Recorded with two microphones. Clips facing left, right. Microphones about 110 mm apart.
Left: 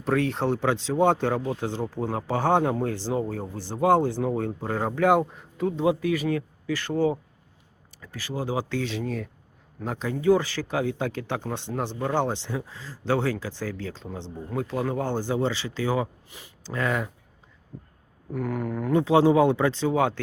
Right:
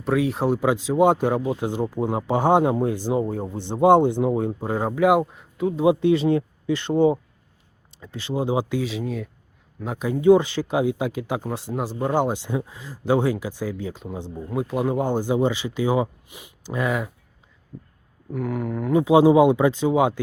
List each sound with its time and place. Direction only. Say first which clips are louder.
0.0 s speech: right 3 dB; 5° right (ahead or behind)
5.8 s speech: right 7 dB; 20° right (ahead or behind)
8.8 s speech: right 2 dB; 5° right (ahead or behind)
11.9 s speech: right 4 dB; 15° right (ahead or behind)
18.3 s speech: right 2 dB; centre (ahead or behind)